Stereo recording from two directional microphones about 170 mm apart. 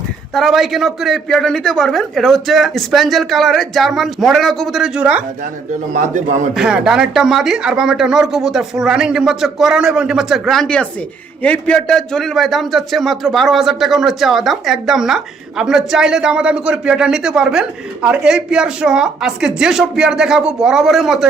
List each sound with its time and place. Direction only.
0.3 s a man's voice: centre (ahead or behind)
5.9 s a man's voice: 45° right (ahead or behind)
6.5 s a man's voice: 5° right (ahead or behind)